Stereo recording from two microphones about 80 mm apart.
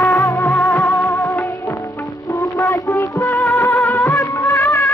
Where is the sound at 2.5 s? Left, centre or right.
Left.